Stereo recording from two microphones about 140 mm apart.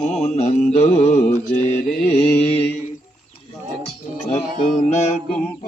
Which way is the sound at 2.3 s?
50° left (ahead or behind).